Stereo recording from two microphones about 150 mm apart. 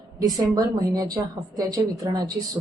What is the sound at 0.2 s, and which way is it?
Speech, 25° right (ahead or behind).